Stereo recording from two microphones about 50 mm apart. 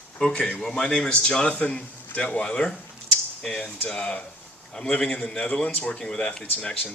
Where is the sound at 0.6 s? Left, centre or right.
Centre.